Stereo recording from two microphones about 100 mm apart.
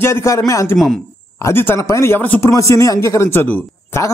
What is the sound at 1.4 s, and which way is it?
Speech, 25° left (ahead or behind).